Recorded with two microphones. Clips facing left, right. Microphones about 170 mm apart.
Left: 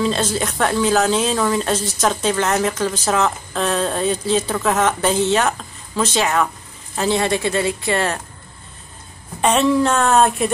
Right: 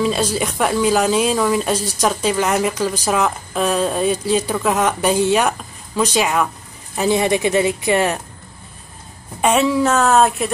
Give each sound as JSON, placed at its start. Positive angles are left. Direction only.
{"t": 0.0, "sound": "a woman's voice", "side_deg": -10}
{"t": 9.4, "sound": "a woman's voice", "side_deg": -5}